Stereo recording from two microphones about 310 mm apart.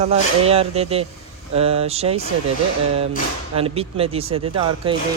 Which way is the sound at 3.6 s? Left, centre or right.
Centre.